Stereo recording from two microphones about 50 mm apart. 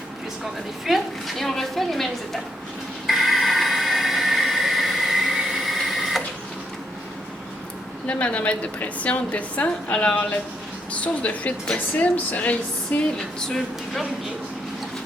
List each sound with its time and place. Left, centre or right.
0.9 s a woman's voice: centre
3.1 s a sound: centre
8.0 s a woman's voice: left
13.4 s speech: centre